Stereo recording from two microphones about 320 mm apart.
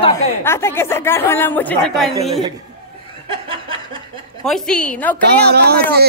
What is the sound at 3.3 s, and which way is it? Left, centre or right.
Chuckle, centre.